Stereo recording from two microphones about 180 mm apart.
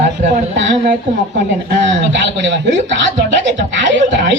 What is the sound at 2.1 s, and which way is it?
Speech, 90° right.